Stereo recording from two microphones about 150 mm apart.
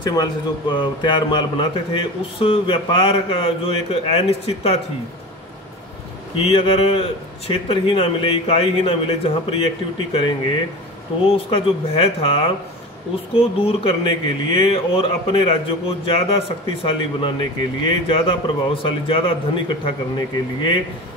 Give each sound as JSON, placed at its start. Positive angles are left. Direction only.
{"t": 0.0, "sound": "speech", "side_deg": 25}
{"t": 6.3, "sound": "speech", "side_deg": 40}
{"t": 11.2, "sound": "speech", "side_deg": 40}